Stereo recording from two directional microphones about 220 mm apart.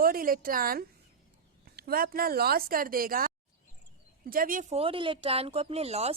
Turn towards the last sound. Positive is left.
turn(degrees=-30)  # may be behind; listen again after turning